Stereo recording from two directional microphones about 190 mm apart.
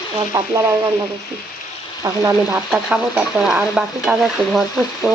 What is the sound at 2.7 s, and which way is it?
Stir, 5° right (ahead or behind).